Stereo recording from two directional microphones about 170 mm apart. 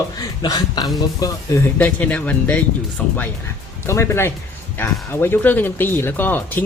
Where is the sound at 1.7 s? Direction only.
10° left (ahead or behind).